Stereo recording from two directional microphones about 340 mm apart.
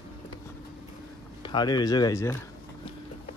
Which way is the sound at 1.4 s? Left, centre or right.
Centre.